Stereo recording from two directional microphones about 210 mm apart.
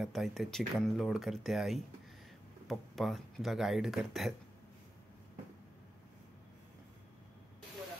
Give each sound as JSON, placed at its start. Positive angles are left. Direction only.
{"t": 0.0, "sound": "speech", "side_deg": 0}